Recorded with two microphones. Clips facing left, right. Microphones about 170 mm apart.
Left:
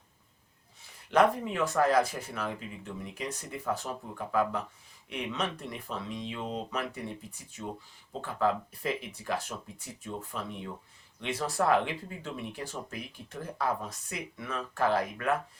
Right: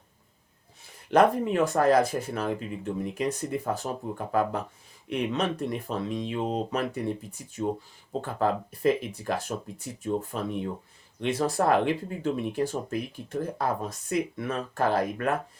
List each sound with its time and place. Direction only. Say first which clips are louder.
1.1 s speech: right 4 dB; 45° right (ahead or behind)
8.2 s speech: right 2 dB; 45° right (ahead or behind)